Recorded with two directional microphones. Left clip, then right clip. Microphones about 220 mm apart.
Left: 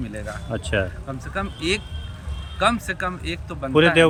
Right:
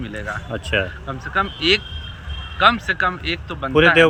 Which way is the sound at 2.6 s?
20° left (ahead or behind).